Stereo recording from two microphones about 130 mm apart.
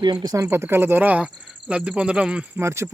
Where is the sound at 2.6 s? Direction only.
20° right (ahead or behind).